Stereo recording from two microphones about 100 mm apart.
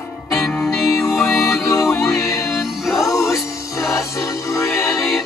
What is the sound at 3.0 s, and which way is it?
Music, 30° left (ahead or behind).